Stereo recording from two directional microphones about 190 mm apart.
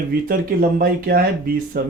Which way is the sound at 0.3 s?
45° right (ahead or behind).